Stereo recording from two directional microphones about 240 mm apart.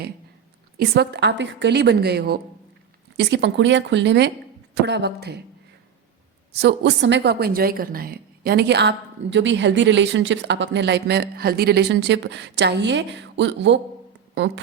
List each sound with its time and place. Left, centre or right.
0.8 s a woman's voice: right
6.5 s a woman's voice: right